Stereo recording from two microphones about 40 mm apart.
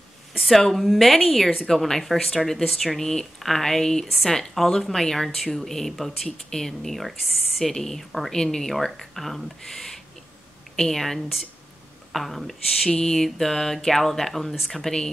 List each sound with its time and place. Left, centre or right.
0.4 s speech: centre
3.0 s speech: centre
12.9 s speech: centre